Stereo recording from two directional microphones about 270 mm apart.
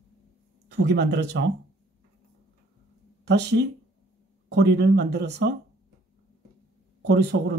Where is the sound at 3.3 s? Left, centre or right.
Right.